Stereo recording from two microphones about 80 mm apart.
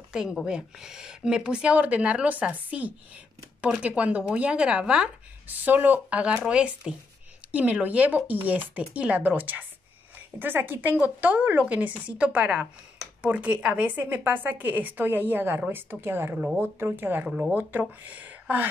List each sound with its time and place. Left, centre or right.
0.1 s a woman's voice: centre; by 17.3 s right
17.3 s speech: centre
17.6 s a woman's voice: right